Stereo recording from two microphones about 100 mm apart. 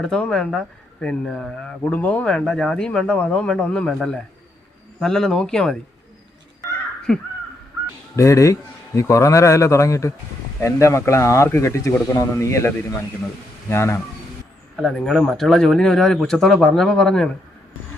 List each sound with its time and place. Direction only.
0.0 s speech: 10° left (ahead or behind)
7.1 s speech: 5° left (ahead or behind)
8.1 s a man's voice: 30° left (ahead or behind)
14.8 s speech: 5° left (ahead or behind)